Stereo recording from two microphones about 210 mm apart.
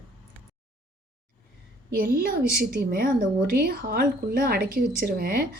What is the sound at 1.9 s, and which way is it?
Speech, 45° right (ahead or behind).